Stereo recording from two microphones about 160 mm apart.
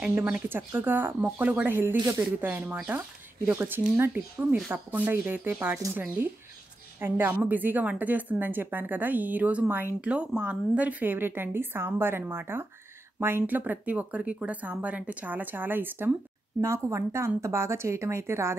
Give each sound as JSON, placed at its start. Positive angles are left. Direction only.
{"t": 0.0, "sound": "a woman's voice", "side_deg": -5}
{"t": 7.0, "sound": "a woman's voice", "side_deg": -10}